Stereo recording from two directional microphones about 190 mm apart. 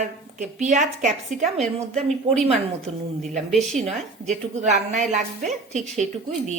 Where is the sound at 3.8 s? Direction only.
35° right (ahead or behind).